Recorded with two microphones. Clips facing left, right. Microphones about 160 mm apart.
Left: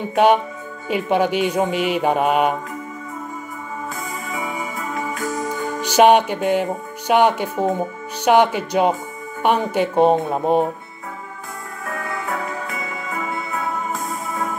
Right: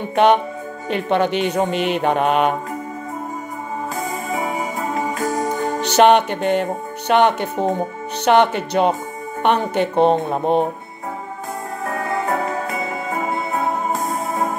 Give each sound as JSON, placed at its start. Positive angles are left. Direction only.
{"t": 0.1, "sound": "mantra", "side_deg": 10}
{"t": 3.9, "sound": "music", "side_deg": -40}
{"t": 5.9, "sound": "mantra", "side_deg": 10}
{"t": 11.8, "sound": "music", "side_deg": -40}